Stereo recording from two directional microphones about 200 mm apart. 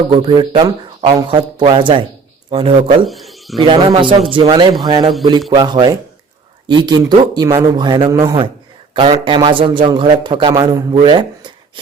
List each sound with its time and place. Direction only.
0.1 s a man's voice: 25° right (ahead or behind)
3.1 s a sound: centre (ahead or behind)
3.6 s a man's voice: 25° right (ahead or behind)